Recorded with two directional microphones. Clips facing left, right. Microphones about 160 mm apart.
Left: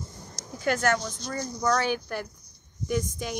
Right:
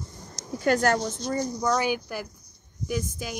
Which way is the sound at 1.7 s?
10° right (ahead or behind).